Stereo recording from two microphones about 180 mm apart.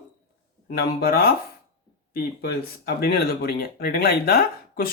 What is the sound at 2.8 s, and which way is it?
Speech, 60° left (ahead or behind).